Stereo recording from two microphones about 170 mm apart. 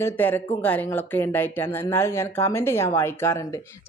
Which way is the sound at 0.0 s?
10° left (ahead or behind).